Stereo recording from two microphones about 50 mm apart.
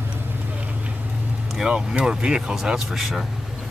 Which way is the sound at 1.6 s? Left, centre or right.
Centre.